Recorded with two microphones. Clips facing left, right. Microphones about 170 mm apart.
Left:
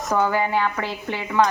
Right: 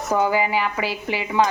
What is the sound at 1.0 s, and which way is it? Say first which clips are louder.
Dishes: left 1 dB; 20° right (ahead or behind).